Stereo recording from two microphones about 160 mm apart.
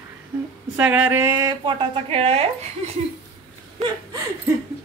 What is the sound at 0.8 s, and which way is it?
A woman's voice, 10° right (ahead or behind).